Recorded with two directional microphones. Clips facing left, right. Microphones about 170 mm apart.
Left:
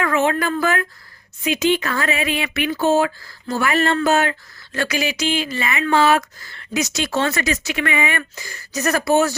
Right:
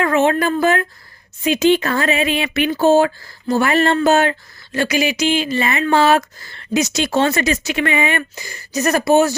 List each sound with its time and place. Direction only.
0.0 s speech: 25° right (ahead or behind)
4.7 s speech: 15° right (ahead or behind)